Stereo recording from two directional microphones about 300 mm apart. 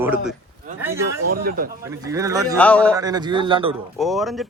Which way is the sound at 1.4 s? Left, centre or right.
Right.